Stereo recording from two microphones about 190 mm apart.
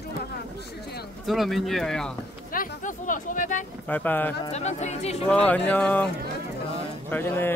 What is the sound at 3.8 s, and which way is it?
Speech, 10° left (ahead or behind).